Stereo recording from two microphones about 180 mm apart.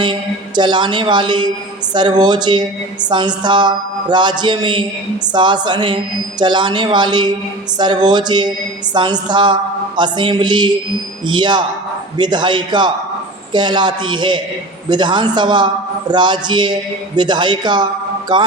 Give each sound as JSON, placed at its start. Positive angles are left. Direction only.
{"t": 0.0, "sound": "a man's voice", "side_deg": -25}